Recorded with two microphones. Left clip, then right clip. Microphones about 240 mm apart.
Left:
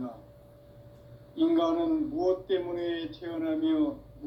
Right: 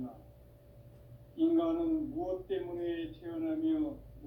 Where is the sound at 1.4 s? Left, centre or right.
Left.